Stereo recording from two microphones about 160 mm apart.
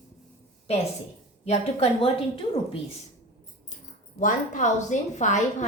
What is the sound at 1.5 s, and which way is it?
A woman's voice, 40° left (ahead or behind).